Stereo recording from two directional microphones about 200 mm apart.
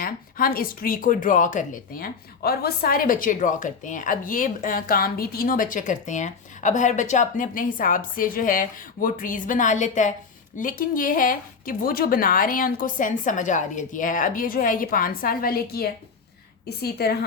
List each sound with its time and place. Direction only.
0.0 s speech: 45° left (ahead or behind)